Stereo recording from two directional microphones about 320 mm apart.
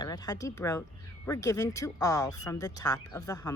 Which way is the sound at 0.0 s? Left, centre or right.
Centre.